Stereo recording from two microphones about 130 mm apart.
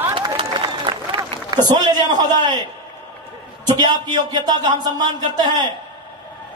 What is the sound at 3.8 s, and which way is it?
A man's voice, 35° right (ahead or behind).